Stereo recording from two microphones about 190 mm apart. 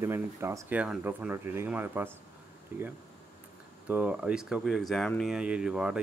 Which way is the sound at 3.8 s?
5° right (ahead or behind).